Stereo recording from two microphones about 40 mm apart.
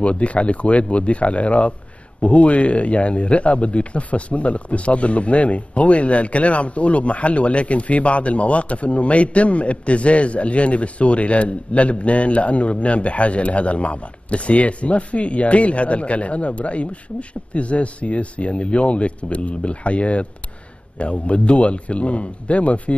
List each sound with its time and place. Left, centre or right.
0.0 s speech: left